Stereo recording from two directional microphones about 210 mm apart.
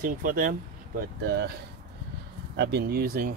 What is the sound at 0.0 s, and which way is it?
Speech, 40° right (ahead or behind).